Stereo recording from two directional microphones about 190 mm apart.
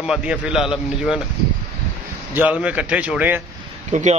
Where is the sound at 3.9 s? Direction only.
40° right (ahead or behind).